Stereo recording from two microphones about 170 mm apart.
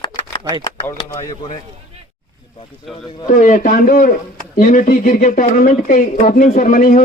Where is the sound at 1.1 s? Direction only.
25° left (ahead or behind).